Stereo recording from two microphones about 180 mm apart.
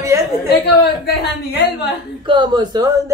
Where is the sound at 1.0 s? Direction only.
65° left (ahead or behind).